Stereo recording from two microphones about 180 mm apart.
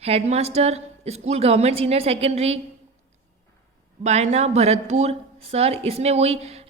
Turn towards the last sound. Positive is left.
turn(degrees=-35)  # may be behind; listen again after turning